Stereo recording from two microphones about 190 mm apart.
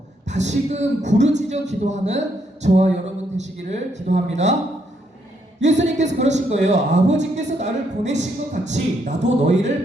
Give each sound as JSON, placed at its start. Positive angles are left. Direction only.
{"t": 0.3, "sound": "a man's voice", "side_deg": -35}
{"t": 5.6, "sound": "a man's voice", "side_deg": -40}